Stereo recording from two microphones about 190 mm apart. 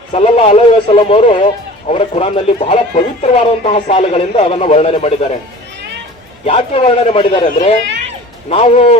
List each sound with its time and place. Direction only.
0.1 s speech: 30° left (ahead or behind)
6.4 s speech: 30° left (ahead or behind)
8.4 s speech: 30° left (ahead or behind)